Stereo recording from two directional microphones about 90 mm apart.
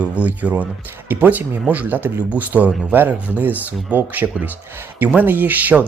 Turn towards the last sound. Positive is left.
turn(degrees=-20)  # may be behind; listen again after turning